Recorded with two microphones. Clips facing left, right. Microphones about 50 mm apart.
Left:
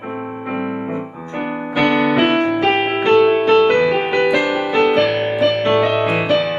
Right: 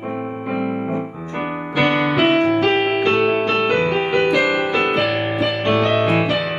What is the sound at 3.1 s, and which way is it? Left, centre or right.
Music, centre.